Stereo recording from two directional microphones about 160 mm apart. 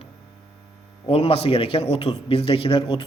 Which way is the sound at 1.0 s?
40° left (ahead or behind).